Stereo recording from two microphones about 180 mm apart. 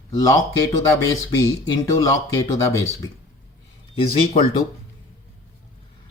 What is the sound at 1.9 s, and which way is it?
Speech, 20° left (ahead or behind).